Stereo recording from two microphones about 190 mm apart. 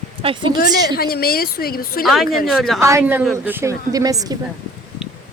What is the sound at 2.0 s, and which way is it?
Speech, centre (ahead or behind).